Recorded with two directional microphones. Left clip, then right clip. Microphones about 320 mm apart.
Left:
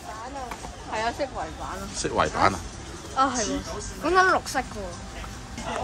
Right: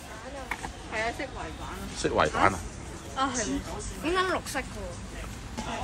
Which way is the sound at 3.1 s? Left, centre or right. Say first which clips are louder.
Left 6 dB; centre.